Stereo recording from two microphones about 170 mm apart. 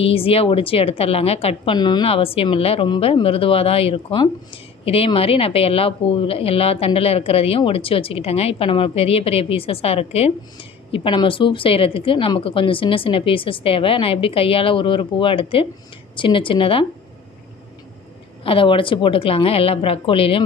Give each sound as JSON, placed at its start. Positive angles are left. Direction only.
{"t": 0.0, "sound": "a woman's voice", "side_deg": 35}
{"t": 18.4, "sound": "a woman's voice", "side_deg": 30}